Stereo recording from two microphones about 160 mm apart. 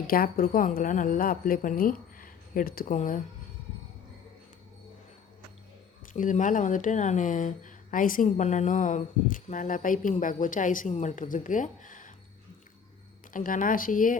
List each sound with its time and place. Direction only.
0.1 s a woman's voice: 65° left (ahead or behind)
6.1 s a woman's voice: 55° left (ahead or behind)
13.3 s a woman's voice: 55° left (ahead or behind)